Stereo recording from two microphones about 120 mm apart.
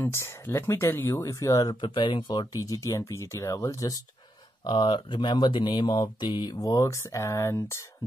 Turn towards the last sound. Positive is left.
turn(degrees=25)  # may be behind; listen again after turning